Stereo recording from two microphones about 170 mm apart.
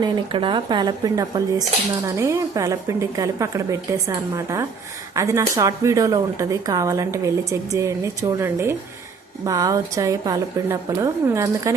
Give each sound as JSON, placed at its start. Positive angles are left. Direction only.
{"t": 0.0, "sound": "speech", "side_deg": -30}